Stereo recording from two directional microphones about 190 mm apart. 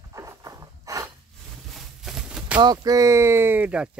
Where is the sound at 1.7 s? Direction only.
Centre (ahead or behind).